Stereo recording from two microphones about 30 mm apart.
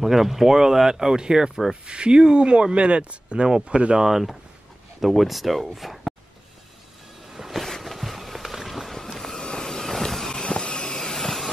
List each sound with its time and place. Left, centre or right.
0.0 s speech: centre
1.9 s speech: right
4.0 s speech: centre
7.8 s run: centre
8.8 s vehicle: centre
9.4 s vehicle: left
10.4 s vehicle: left
10.9 s vehicle: centre